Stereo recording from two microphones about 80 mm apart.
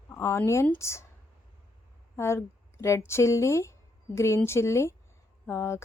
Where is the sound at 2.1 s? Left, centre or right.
Left.